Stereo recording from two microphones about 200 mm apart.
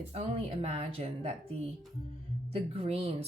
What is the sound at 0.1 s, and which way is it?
Speech, 30° right (ahead or behind).